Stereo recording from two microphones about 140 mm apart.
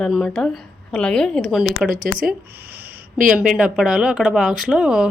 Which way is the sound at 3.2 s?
5° right (ahead or behind).